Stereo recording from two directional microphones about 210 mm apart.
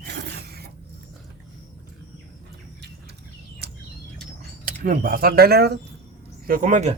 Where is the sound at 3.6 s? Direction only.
50° right (ahead or behind).